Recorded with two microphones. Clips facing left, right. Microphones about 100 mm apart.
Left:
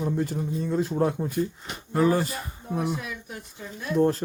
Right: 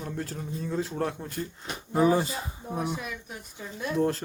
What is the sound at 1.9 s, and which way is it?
Speech, 15° right (ahead or behind).